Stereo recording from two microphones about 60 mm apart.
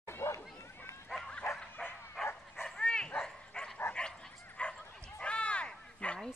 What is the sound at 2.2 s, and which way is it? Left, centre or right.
Dog, centre.